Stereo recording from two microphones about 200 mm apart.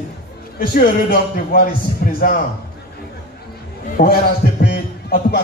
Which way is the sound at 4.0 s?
50° left (ahead or behind).